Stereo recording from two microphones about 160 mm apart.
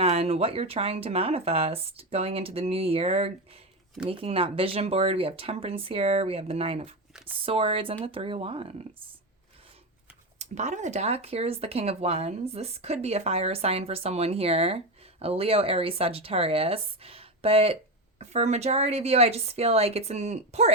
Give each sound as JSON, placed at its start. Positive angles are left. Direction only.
{"t": 0.0, "sound": "speech", "side_deg": -40}
{"t": 10.3, "sound": "speech", "side_deg": -45}